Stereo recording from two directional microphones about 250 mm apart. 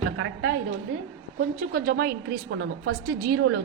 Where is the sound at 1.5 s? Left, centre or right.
Right.